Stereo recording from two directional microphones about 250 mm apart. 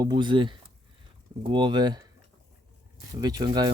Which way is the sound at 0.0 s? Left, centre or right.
Centre.